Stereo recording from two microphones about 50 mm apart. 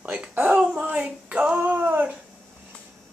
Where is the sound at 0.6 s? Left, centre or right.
Right.